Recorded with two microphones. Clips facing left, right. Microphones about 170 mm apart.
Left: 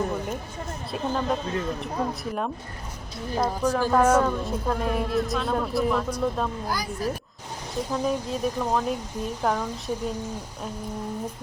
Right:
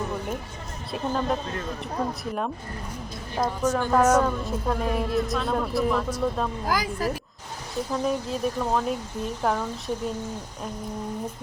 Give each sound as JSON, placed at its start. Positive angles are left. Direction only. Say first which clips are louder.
{"t": 0.9, "sound": "a woman's voice", "louder": "even", "side_deg": 0}
{"t": 6.7, "sound": "speech", "louder": "right 3 dB", "side_deg": -90}
{"t": 7.9, "sound": "a woman's voice", "louder": "even", "side_deg": 0}